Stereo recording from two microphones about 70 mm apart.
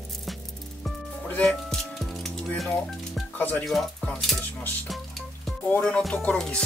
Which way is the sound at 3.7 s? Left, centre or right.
Centre.